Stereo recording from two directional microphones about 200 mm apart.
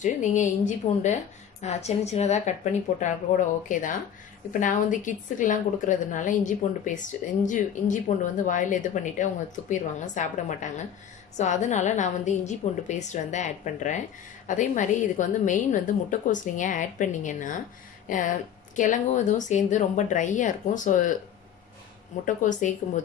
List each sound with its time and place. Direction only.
0.0 s a woman's voice: 40° left (ahead or behind)
22.2 s a woman's voice: 40° left (ahead or behind)